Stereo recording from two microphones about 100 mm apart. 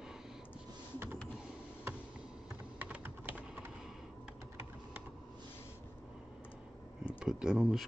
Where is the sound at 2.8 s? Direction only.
20° right (ahead or behind).